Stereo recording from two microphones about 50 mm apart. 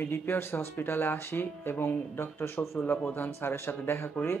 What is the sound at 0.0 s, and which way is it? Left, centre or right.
Speech, left.